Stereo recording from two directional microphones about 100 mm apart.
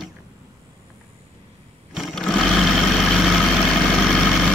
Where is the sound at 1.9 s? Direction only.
Centre (ahead or behind).